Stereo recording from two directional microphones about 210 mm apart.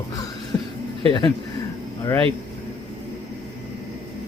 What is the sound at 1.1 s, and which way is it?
Mantra, 20° left (ahead or behind).